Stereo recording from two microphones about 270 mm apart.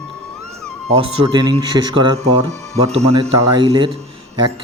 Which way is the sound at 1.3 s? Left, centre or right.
Centre.